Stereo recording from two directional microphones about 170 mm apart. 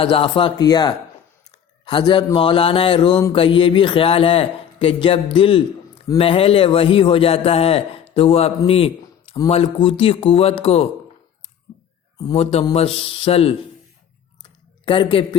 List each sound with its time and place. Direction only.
0.0 s speech: 30° left (ahead or behind)
1.8 s mantra: 30° left (ahead or behind)
12.3 s mantra: 35° left (ahead or behind)
14.8 s mantra: 30° left (ahead or behind)